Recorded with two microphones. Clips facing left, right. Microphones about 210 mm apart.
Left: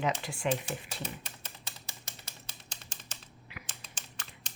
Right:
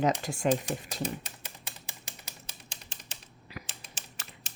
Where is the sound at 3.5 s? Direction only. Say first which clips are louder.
Right 6 dB; 40° right (ahead or behind).